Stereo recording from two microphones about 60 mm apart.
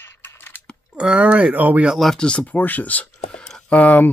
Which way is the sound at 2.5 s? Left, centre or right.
Left.